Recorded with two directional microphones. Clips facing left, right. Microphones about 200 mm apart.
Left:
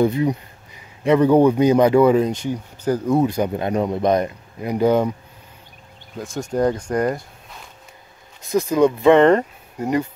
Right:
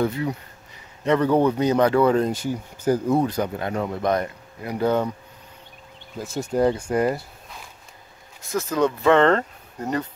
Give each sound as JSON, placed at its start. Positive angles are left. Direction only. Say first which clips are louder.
{"t": 0.0, "sound": "speech", "louder": "left 6 dB", "side_deg": 20}
{"t": 2.2, "sound": "speech", "louder": "left 2 dB", "side_deg": -5}
{"t": 3.2, "sound": "speech", "louder": "left 4 dB", "side_deg": 10}
{"t": 6.1, "sound": "speech", "louder": "left 1 dB", "side_deg": -5}
{"t": 8.4, "sound": "speech", "louder": "left 6 dB", "side_deg": 15}